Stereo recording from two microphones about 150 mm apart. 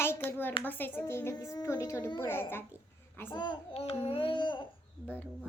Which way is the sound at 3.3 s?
30° left (ahead or behind).